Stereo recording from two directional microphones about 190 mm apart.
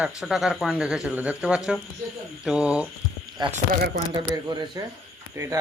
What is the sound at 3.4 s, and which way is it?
Speech, 25° right (ahead or behind).